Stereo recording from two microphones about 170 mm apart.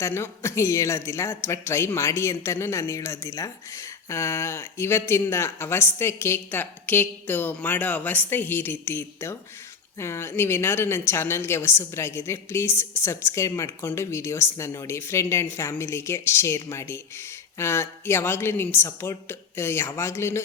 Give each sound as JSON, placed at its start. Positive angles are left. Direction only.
{"t": 0.0, "sound": "a woman's voice", "side_deg": 15}